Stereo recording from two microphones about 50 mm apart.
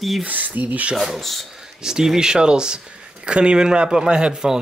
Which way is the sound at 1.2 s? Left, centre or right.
Centre.